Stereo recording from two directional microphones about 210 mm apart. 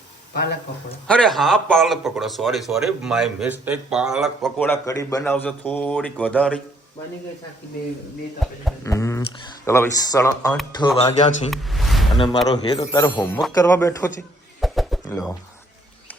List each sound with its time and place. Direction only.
1.0 s speech: 5° left (ahead or behind)
8.8 s speech: 15° left (ahead or behind)
10.8 s a man's voice: 30° left (ahead or behind)
11.5 s speech: centre (ahead or behind)
12.5 s speech: 20° left (ahead or behind)
14.6 s a sound: centre (ahead or behind)